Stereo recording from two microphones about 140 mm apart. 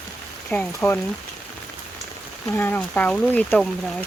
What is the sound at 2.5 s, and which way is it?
Speech, 10° left (ahead or behind).